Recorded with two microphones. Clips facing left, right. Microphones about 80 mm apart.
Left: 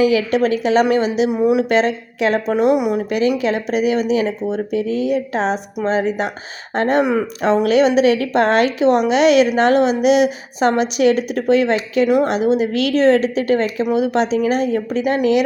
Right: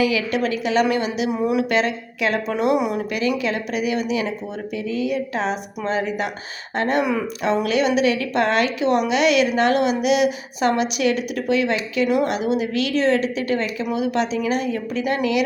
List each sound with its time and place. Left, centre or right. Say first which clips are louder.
0.0 s a woman's voice: left 5 dB; left
1.3 s a woman's voice: left 3 dB; left
1.7 s a woman's voice: left 5 dB; left
3.1 s a woman's voice: left 5 dB; left
12.0 s a woman's voice: left 4 dB; left
12.3 s a woman's voice: left 5 dB; left